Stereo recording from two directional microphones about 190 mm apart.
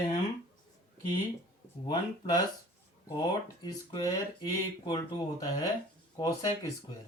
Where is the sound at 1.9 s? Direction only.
20° left (ahead or behind).